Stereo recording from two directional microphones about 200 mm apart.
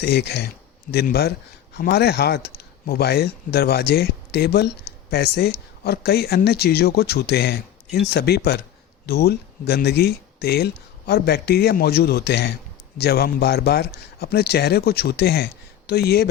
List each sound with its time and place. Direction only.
0.0 s speech: 55° left (ahead or behind)